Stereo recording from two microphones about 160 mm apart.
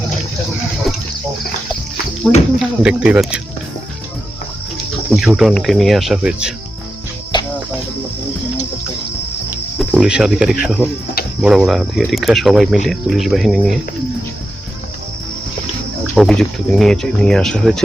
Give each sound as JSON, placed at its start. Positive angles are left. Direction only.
{"t": 2.6, "sound": "speech", "side_deg": -5}
{"t": 5.1, "sound": "speech", "side_deg": -5}
{"t": 7.3, "sound": "cricket", "side_deg": 30}
{"t": 9.7, "sound": "speech", "side_deg": -5}
{"t": 16.1, "sound": "speech", "side_deg": 0}